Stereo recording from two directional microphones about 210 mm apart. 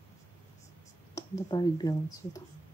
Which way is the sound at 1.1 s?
20° left (ahead or behind).